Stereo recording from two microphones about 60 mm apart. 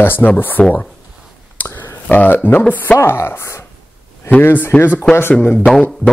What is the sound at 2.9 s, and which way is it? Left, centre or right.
Speech, left.